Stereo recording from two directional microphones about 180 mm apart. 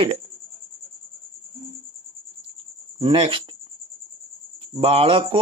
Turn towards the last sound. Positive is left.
turn(degrees=-30)  # may be behind; listen again after turning